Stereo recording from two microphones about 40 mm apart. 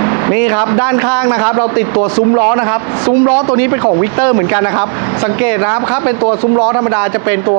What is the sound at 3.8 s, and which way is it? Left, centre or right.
Speech, right.